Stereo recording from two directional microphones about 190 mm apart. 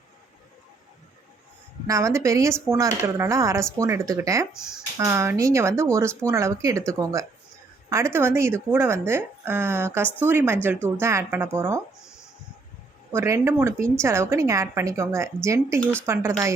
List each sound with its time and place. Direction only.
1.9 s speech: 15° right (ahead or behind)
13.1 s speech: 15° right (ahead or behind)